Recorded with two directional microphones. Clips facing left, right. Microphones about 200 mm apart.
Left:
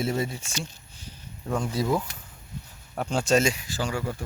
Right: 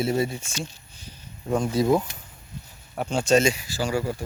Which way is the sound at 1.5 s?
20° right (ahead or behind).